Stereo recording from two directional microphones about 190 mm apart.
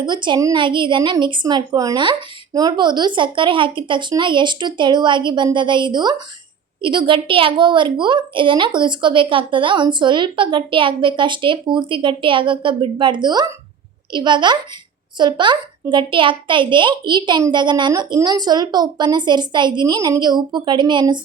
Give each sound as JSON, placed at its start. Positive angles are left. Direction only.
{"t": 0.0, "sound": "a woman's voice", "side_deg": -25}